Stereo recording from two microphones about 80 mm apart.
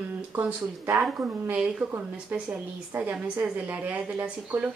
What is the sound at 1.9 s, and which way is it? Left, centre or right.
A woman's voice, right.